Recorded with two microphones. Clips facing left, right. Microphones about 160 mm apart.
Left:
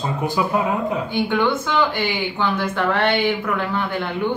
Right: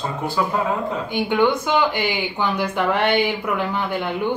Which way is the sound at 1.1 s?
15° right (ahead or behind).